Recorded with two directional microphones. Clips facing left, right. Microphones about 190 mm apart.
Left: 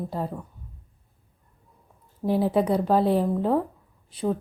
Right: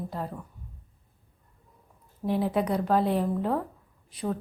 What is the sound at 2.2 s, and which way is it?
A woman's voice, 35° left (ahead or behind).